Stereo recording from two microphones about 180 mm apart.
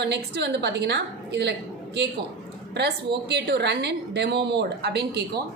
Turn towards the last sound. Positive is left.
turn(degrees=-65)  # may be behind; listen again after turning